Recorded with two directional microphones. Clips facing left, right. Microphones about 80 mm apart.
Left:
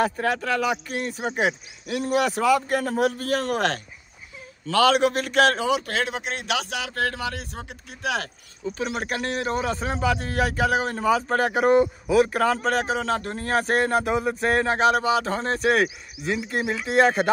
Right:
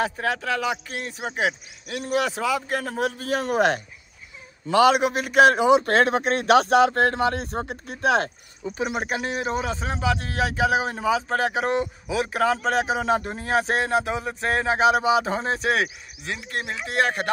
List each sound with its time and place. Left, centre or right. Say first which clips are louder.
0.0 s a man's voice: left 2 dB; centre
5.9 s speech: right 7 dB; right
8.6 s a man's voice: right 1 dB; centre